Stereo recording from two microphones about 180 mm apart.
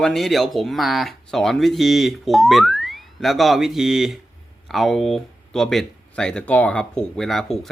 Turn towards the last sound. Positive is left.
turn(degrees=0)  # may be behind; listen again after turning